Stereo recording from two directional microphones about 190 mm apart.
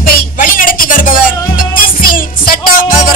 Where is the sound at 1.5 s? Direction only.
50° left (ahead or behind).